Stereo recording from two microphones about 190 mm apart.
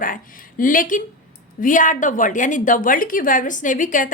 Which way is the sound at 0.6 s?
45° left (ahead or behind).